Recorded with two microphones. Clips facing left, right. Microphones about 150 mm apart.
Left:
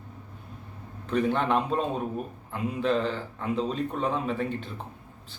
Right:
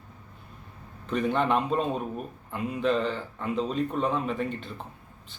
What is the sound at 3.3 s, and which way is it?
A man's voice, centre (ahead or behind).